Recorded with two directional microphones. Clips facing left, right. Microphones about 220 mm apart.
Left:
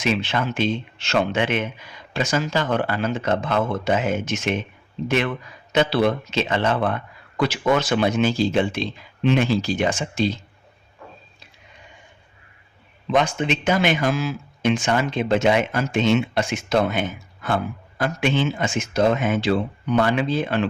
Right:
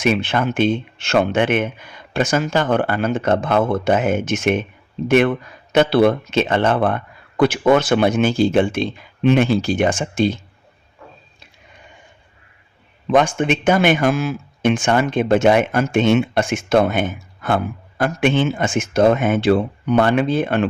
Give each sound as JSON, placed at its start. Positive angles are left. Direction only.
{"t": 0.0, "sound": "speech", "side_deg": -55}
{"t": 13.1, "sound": "speech", "side_deg": -50}